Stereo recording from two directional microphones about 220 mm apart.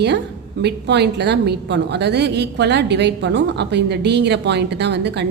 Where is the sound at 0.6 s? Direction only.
50° right (ahead or behind).